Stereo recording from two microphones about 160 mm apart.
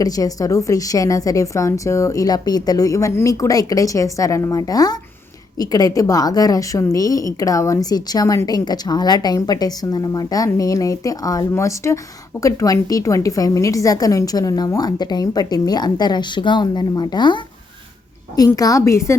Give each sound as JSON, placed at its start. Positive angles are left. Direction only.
{"t": 0.0, "sound": "a woman's voice", "side_deg": 20}